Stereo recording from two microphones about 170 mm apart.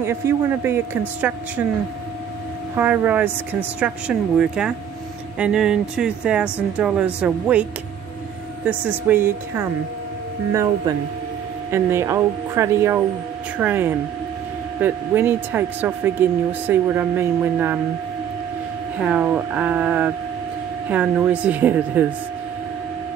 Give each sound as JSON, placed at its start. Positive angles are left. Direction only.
{"t": 0.0, "sound": "speech", "side_deg": -15}
{"t": 2.7, "sound": "speech", "side_deg": -10}
{"t": 9.0, "sound": "speech", "side_deg": -10}
{"t": 18.9, "sound": "speech", "side_deg": -5}